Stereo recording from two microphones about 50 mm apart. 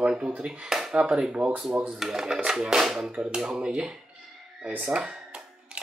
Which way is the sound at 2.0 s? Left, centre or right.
Centre.